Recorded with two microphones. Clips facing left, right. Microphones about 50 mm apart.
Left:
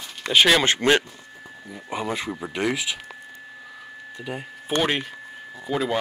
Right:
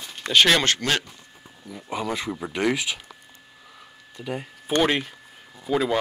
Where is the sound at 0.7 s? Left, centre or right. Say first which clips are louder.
Left 5 dB; left.